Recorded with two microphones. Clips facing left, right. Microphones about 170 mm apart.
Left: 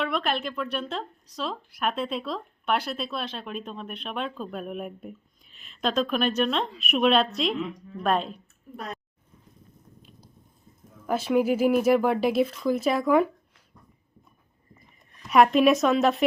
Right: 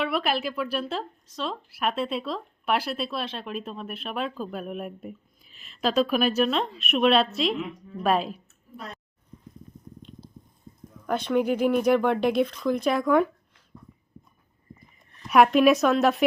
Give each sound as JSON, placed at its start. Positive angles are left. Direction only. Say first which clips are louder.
{"t": 0.0, "sound": "speech", "louder": "right 1 dB", "side_deg": -5}
{"t": 10.0, "sound": "biting", "louder": "right 8 dB", "side_deg": 5}
{"t": 11.0, "sound": "speech", "louder": "left 1 dB", "side_deg": 5}
{"t": 15.3, "sound": "speech", "louder": "right 1 dB", "side_deg": 0}